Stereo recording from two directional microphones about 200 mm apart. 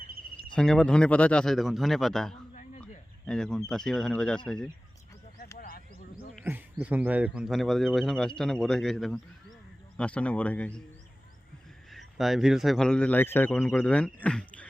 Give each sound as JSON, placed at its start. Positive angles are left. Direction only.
{"t": 0.5, "sound": "a man's voice", "side_deg": 5}
{"t": 5.5, "sound": "a sound", "side_deg": 45}
{"t": 6.4, "sound": "a man's voice", "side_deg": -10}
{"t": 11.9, "sound": "a man's voice", "side_deg": 0}